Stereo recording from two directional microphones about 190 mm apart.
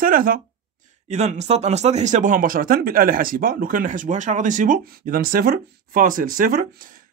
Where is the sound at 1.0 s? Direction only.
35° right (ahead or behind).